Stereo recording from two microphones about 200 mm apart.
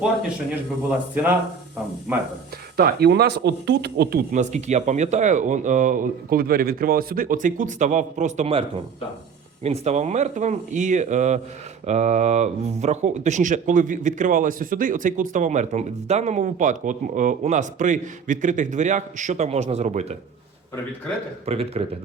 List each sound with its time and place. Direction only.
1.1 s speech: 10° right (ahead or behind)
2.7 s speech: 50° right (ahead or behind); by 8.6 s 30° right (ahead or behind)
9.6 s speech: 35° right (ahead or behind)
21.4 s speech: 30° right (ahead or behind)